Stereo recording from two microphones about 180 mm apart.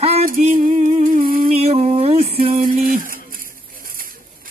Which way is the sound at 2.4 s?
50° right (ahead or behind).